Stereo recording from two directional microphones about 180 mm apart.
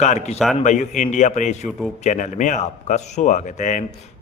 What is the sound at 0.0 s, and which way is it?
A man's voice, 40° left (ahead or behind).